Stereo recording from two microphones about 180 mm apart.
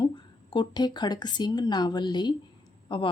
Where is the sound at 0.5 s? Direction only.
25° left (ahead or behind).